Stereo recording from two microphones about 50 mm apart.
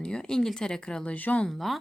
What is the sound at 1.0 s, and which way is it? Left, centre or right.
Speech, left.